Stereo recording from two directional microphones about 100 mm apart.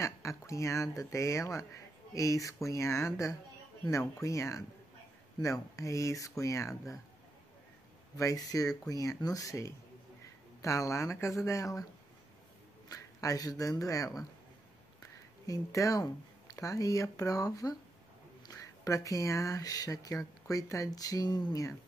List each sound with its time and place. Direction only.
0.0 s speech: 30° left (ahead or behind)
8.2 s speech: 35° left (ahead or behind)
12.8 s speech: 35° left (ahead or behind)
15.4 s speech: 35° left (ahead or behind)